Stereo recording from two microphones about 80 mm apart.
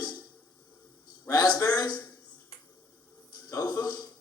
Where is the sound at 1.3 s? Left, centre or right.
Left.